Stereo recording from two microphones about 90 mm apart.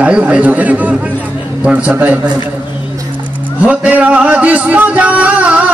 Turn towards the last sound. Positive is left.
turn(degrees=-15)  # may be behind; listen again after turning